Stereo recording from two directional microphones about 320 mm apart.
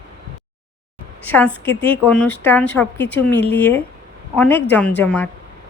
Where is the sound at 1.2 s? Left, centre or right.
Centre.